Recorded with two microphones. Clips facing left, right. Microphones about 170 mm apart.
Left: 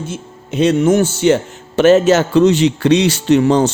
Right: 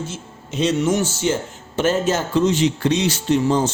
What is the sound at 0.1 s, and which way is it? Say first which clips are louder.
A man's voice: left 6 dB; 60° left (ahead or behind).